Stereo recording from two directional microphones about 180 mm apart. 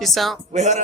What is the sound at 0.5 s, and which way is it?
Speech, 40° right (ahead or behind).